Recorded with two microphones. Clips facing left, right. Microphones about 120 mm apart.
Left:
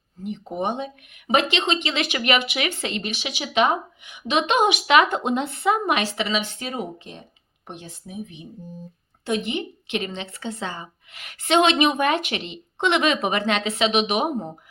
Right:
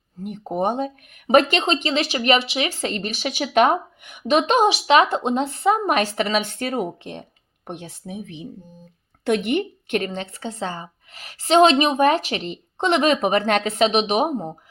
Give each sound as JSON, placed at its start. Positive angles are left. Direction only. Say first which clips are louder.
{"t": 0.2, "sound": "speech", "louder": "right 3 dB", "side_deg": -50}
{"t": 9.2, "sound": "speech", "louder": "right 5 dB", "side_deg": -60}